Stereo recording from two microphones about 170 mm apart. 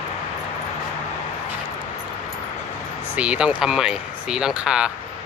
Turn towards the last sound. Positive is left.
turn(degrees=-5)  # may be behind; listen again after turning